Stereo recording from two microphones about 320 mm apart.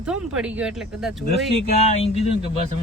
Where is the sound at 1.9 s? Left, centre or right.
Centre.